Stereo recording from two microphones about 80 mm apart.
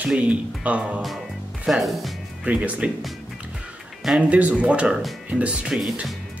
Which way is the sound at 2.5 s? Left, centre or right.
Centre.